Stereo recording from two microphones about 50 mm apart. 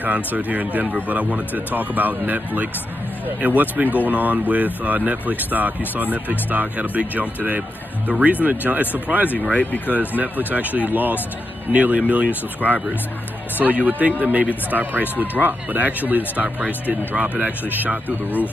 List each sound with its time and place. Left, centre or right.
0.0 s speech: right
9.5 s speech: left
9.8 s speech: right
12.6 s speech: left
13.6 s speech: right
17.1 s speech: right